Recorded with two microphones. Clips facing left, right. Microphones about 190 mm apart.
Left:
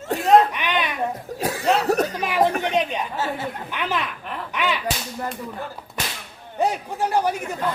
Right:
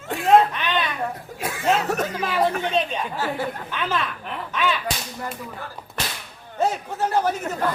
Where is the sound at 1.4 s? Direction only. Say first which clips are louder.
Left 1 dB; 35° left (ahead or behind).